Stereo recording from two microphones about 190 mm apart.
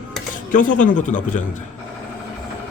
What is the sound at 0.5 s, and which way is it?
Speech, 45° left (ahead or behind).